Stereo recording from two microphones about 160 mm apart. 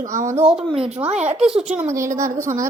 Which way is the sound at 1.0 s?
40° right (ahead or behind).